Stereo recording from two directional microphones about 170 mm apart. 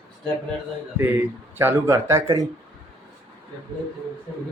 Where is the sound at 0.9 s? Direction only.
10° right (ahead or behind).